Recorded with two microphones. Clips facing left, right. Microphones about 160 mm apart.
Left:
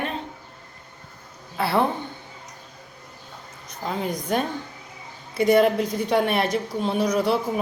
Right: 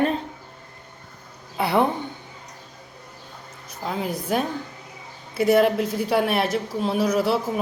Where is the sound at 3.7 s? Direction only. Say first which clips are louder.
Even; centre (ahead or behind).